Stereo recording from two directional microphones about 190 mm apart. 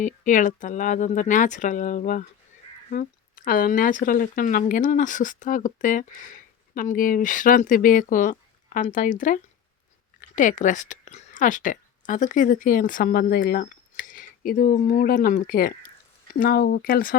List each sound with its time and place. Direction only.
0.0 s a woman's voice: 45° left (ahead or behind)